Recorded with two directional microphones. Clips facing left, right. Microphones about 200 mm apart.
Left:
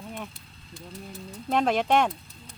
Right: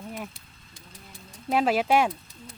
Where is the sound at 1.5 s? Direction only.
5° right (ahead or behind).